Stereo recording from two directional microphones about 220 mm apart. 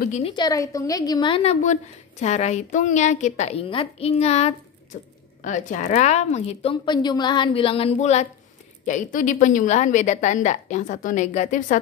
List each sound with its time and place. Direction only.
0.2 s a woman's voice: 20° left (ahead or behind); by 11.8 s 35° left (ahead or behind)